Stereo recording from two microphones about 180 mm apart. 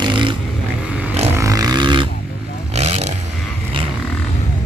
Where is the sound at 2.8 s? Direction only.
35° right (ahead or behind).